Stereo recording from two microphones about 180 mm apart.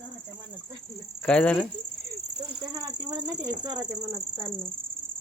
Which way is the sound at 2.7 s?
20° right (ahead or behind).